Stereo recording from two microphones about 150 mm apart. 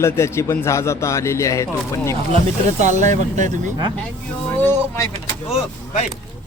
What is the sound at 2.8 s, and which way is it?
Speech, 55° right (ahead or behind).